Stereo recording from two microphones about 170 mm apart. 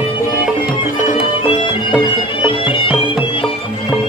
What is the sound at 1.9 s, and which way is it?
Music, 30° left (ahead or behind).